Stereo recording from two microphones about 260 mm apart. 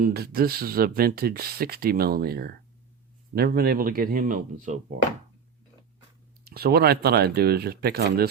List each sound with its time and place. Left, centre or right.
0.0 s speech: right
6.4 s speech: right